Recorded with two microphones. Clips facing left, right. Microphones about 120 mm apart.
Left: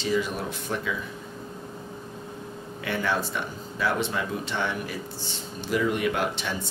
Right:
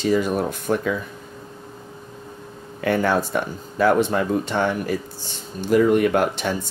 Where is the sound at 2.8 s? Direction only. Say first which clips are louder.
Right 8 dB; 45° right (ahead or behind).